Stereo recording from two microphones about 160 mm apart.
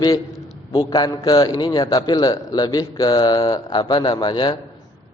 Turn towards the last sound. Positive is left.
turn(degrees=30)  # may be behind; listen again after turning